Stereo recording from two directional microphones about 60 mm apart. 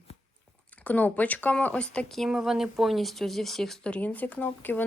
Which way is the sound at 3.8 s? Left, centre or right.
Left.